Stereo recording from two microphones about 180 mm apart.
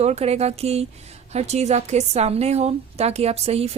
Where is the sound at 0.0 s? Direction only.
35° right (ahead or behind).